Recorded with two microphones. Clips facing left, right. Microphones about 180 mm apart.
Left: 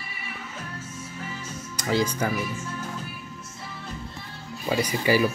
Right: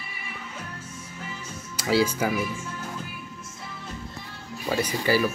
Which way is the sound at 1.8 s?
5° right (ahead or behind).